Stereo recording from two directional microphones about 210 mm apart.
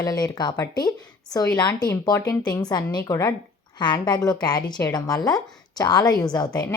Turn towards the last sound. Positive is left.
turn(degrees=20)  # may be behind; listen again after turning